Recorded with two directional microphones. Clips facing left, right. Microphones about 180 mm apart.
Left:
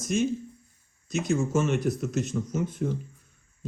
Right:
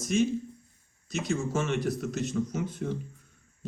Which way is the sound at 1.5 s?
45° left (ahead or behind).